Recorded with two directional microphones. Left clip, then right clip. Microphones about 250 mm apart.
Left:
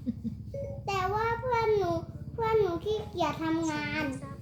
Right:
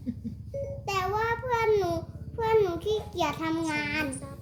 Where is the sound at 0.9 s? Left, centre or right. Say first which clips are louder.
Right 1 dB; centre.